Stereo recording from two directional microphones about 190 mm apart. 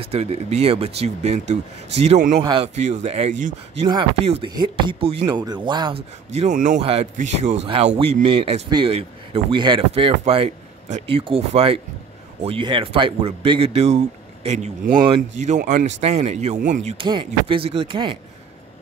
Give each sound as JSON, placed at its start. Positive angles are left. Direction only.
{"t": 0.0, "sound": "speech", "side_deg": -30}
{"t": 2.4, "sound": "speech", "side_deg": -30}
{"t": 3.8, "sound": "speech", "side_deg": -30}
{"t": 16.9, "sound": "speech", "side_deg": -25}